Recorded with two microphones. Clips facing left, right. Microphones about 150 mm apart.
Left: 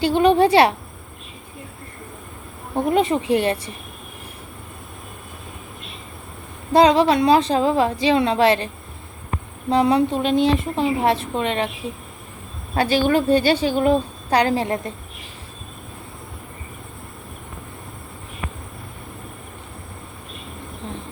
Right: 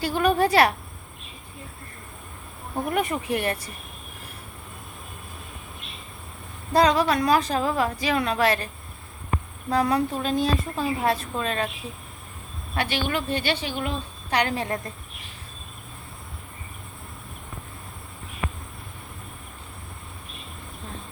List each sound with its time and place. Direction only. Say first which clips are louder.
0.0 s speech: left 6 dB; 25° left (ahead or behind)
2.7 s speech: left 7 dB; 25° left (ahead or behind)
6.7 s speech: left 6 dB; 25° left (ahead or behind)
12.7 s a woman's voice: left 9 dB; 40° left (ahead or behind)